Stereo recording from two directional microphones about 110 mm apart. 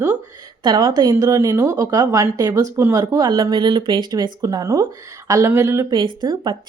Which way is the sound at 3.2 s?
40° right (ahead or behind).